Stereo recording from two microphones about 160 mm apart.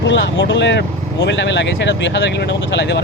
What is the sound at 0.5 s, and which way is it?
Speech, 90° left.